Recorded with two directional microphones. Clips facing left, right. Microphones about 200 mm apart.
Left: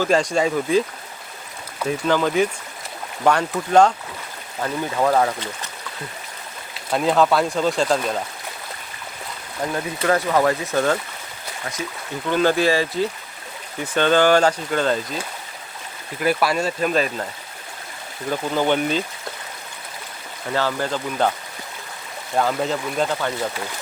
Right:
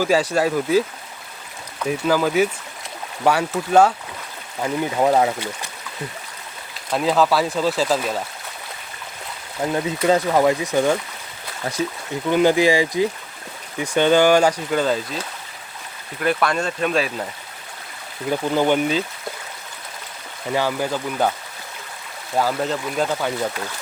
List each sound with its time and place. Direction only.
0.0 s speech: 5° right (ahead or behind)
1.9 s speech: 5° right (ahead or behind)
4.6 s speech: 15° right (ahead or behind)
6.9 s speech: centre (ahead or behind)
9.6 s speech: 20° right (ahead or behind)
12.3 s speech: 15° right (ahead or behind)
16.2 s speech: 5° left (ahead or behind)
18.3 s speech: 10° right (ahead or behind)
20.5 s speech: 10° right (ahead or behind)
22.4 s speech: centre (ahead or behind)